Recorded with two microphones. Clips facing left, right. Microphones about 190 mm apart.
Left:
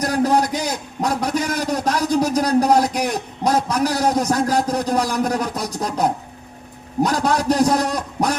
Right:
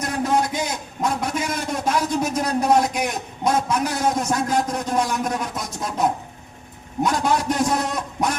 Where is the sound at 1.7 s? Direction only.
35° left (ahead or behind).